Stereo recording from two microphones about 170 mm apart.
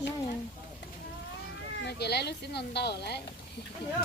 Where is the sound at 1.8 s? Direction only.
75° left (ahead or behind).